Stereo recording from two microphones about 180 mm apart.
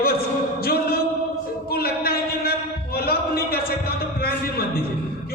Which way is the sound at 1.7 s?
60° left (ahead or behind).